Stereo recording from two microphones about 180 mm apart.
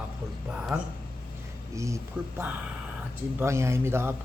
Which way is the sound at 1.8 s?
15° right (ahead or behind).